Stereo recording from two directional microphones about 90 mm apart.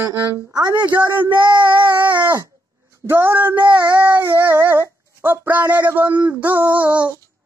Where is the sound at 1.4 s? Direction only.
60° right (ahead or behind).